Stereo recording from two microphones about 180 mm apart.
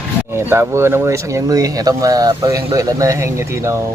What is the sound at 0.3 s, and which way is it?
Speech, 15° right (ahead or behind).